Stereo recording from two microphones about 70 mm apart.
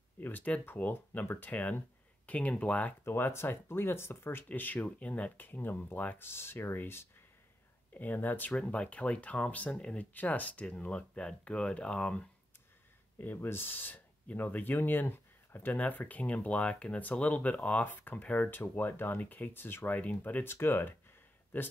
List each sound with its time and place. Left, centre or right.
0.2 s speech: left
3.1 s speech: left
7.9 s speech: left
13.2 s speech: left
20.4 s speech: left